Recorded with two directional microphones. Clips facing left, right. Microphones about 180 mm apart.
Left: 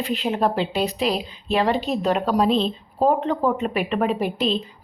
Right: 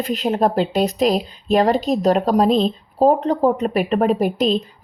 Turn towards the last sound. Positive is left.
turn(degrees=-40)  # may be behind; listen again after turning